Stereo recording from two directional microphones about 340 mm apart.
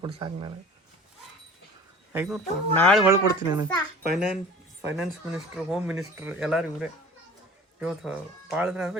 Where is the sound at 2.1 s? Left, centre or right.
Centre.